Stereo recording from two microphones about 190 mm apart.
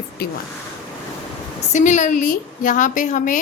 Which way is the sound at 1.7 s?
40° left (ahead or behind).